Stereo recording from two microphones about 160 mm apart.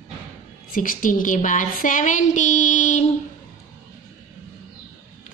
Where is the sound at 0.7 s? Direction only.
60° left (ahead or behind).